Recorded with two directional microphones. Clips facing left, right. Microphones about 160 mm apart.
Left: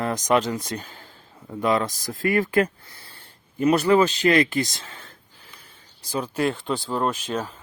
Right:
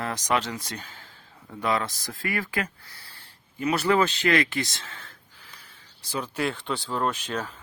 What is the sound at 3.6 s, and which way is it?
Speech, 35° left (ahead or behind).